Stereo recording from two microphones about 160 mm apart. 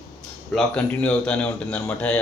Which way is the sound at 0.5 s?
5° left (ahead or behind).